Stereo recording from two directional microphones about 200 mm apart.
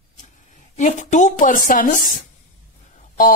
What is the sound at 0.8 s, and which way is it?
A woman's voice, 35° left (ahead or behind).